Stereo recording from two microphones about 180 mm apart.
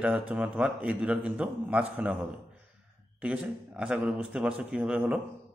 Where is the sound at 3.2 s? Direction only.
5° right (ahead or behind).